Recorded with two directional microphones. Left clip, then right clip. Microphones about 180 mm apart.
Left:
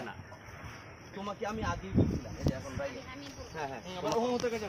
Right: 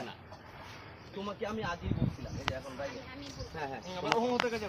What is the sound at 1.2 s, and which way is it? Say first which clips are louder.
Speech: left 1 dB; centre (ahead or behind).